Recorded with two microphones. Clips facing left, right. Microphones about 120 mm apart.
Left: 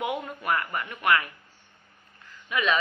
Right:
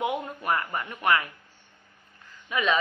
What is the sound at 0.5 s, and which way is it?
Speech, 20° right (ahead or behind).